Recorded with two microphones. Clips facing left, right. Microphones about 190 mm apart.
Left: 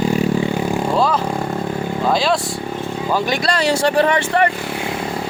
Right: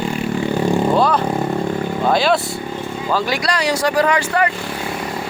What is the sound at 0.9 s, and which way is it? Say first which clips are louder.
Speech: right 2 dB; centre (ahead or behind).